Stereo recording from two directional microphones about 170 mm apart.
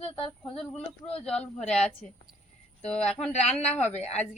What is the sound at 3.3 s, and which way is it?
Speech, 40° left (ahead or behind).